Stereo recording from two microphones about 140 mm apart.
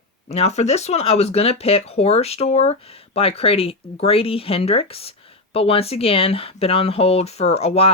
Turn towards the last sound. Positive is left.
turn(degrees=45)  # may be behind; listen again after turning